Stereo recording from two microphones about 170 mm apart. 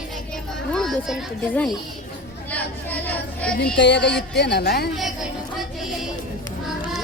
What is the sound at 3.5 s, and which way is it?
Speech, 70° left (ahead or behind).